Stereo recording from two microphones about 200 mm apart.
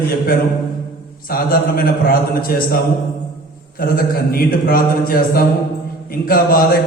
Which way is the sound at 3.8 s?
45° left (ahead or behind).